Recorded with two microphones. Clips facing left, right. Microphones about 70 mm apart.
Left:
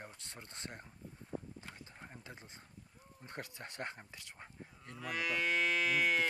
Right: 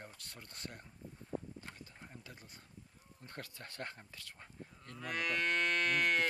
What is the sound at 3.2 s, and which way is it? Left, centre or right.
Speech, left.